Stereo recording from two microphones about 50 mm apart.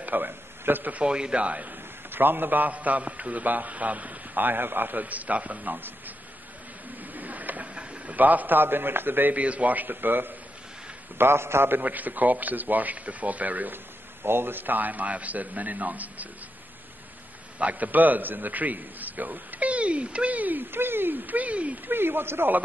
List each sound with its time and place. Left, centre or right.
0.0 s a man's voice: right
0.9 s a man's voice: centre
2.0 s a man's voice: right
7.0 s a sound: right
7.7 s a sound: right
8.2 s a man's voice: right
9.3 s a man's voice: right
11.1 s a man's voice: right
11.8 s a man's voice: right
14.2 s a man's voice: right
17.6 s a man's voice: right
21.8 s speech: right